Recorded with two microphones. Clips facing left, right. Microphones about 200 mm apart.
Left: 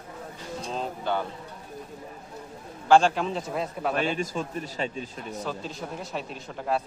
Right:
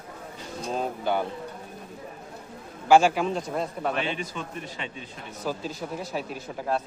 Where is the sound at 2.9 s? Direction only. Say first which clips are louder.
Right 1 dB; 5° right (ahead or behind).